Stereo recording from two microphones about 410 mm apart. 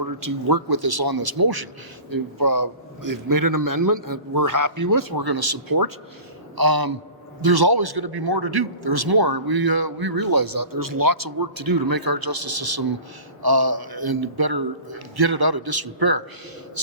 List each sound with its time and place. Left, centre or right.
0.0 s a man's voice: right